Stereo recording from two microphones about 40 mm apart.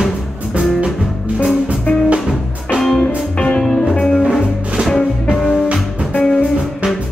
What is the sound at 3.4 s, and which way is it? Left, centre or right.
Music, left.